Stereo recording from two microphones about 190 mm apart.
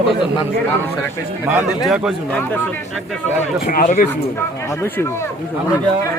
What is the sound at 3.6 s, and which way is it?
Speech, 40° left (ahead or behind).